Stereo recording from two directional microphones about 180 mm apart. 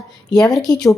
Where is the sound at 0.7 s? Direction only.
20° left (ahead or behind).